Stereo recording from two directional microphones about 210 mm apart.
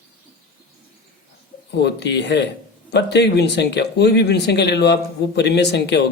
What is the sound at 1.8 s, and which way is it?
Speech, 55° left (ahead or behind).